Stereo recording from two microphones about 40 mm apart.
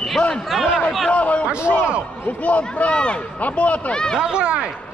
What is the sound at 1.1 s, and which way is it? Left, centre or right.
Speech, left.